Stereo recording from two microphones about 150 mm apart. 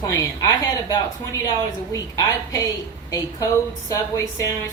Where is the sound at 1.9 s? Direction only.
20° left (ahead or behind).